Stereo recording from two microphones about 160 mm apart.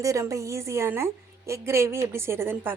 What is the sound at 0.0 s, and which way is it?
A woman's voice, 20° right (ahead or behind).